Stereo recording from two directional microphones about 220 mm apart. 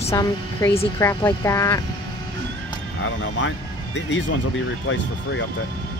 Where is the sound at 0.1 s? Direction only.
15° left (ahead or behind).